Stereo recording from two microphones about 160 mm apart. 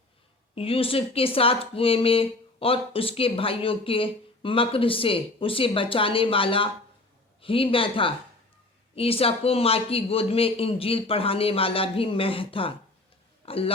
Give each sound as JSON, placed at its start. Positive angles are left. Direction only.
{"t": 0.5, "sound": "speech", "side_deg": 35}